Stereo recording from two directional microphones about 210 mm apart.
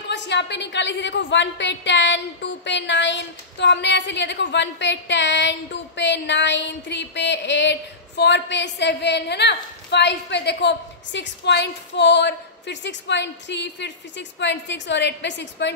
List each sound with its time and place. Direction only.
0.1 s a woman's voice: 55° left (ahead or behind)